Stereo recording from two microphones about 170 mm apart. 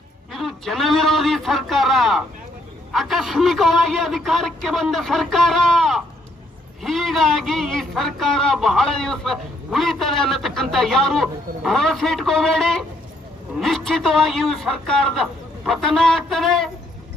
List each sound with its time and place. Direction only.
0.3 s a man's voice: centre (ahead or behind)